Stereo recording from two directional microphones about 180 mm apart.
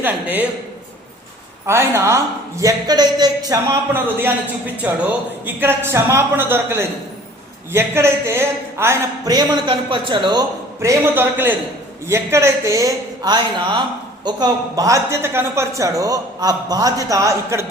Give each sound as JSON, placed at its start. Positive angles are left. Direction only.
{"t": 0.0, "sound": "speech", "side_deg": -10}
{"t": 1.6, "sound": "speech", "side_deg": -15}